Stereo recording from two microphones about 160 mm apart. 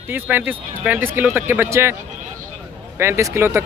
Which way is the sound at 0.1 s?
10° right (ahead or behind).